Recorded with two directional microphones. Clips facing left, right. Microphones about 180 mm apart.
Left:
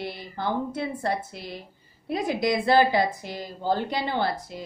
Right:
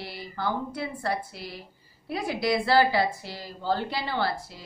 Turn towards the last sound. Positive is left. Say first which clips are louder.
# left 2 dB
turn(degrees=20)  # may be behind; listen again after turning